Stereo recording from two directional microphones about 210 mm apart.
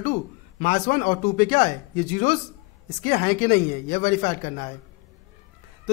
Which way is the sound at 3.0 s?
35° left (ahead or behind).